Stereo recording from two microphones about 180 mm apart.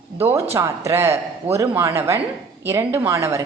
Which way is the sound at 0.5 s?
15° right (ahead or behind).